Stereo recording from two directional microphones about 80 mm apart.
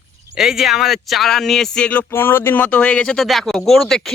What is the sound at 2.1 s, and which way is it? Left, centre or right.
A man's voice, left.